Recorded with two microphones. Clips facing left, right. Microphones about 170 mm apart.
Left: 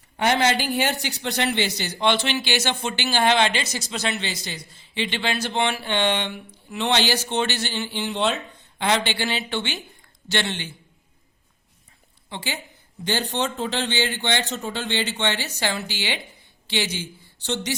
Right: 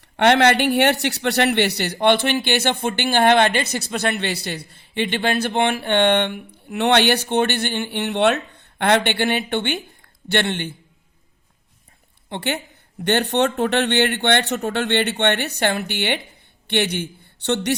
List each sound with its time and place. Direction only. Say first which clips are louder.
0.2 s a man's voice: right 6 dB; 65° right (ahead or behind)
12.3 s a man's voice: right 7 dB; 65° right (ahead or behind)